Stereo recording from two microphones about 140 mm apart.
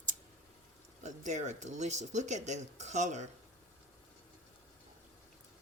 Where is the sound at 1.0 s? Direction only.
60° right (ahead or behind).